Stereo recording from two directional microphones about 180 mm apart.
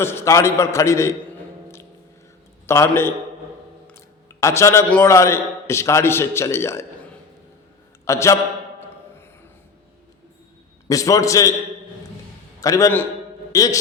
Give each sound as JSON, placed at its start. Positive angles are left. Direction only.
{"t": 0.0, "sound": "a man's voice", "side_deg": 15}
{"t": 2.6, "sound": "a man's voice", "side_deg": 15}
{"t": 8.0, "sound": "a man's voice", "side_deg": 15}
{"t": 10.8, "sound": "a man's voice", "side_deg": 20}
{"t": 12.5, "sound": "a man's voice", "side_deg": 20}